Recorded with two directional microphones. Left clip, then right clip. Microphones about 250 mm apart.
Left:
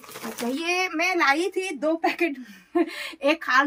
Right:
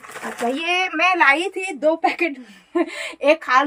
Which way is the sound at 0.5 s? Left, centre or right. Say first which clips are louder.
Right 3 dB; left.